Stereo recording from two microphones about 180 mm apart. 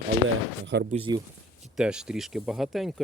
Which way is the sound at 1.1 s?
25° right (ahead or behind).